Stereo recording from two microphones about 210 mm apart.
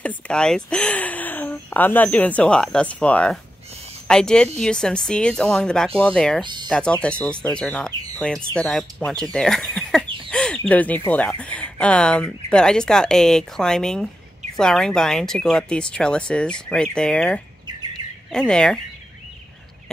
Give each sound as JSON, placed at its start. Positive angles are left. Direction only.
{"t": 0.0, "sound": "speech", "side_deg": 5}
{"t": 6.4, "sound": "speech", "side_deg": -20}
{"t": 6.7, "sound": "speech", "side_deg": 5}
{"t": 10.0, "sound": "a sound", "side_deg": -25}
{"t": 10.3, "sound": "bird", "side_deg": 5}
{"t": 10.7, "sound": "speech", "side_deg": 5}
{"t": 18.5, "sound": "speech", "side_deg": 5}